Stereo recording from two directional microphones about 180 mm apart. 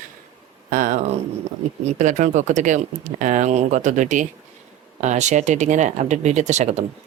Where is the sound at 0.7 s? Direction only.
50° right (ahead or behind).